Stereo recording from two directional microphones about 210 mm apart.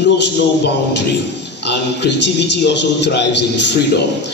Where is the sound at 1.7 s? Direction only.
55° left (ahead or behind).